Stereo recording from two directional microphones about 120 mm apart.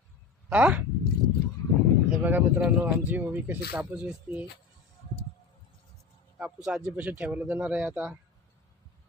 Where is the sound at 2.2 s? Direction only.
15° right (ahead or behind).